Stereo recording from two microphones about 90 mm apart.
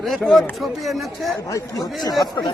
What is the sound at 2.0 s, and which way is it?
Speech, 50° left (ahead or behind).